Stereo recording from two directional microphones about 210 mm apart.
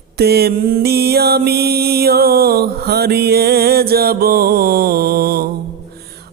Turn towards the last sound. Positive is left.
turn(degrees=-45)  # may be behind; listen again after turning